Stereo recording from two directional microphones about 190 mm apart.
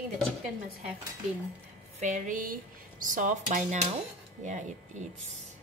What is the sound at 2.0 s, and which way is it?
A woman's voice, 40° right (ahead or behind).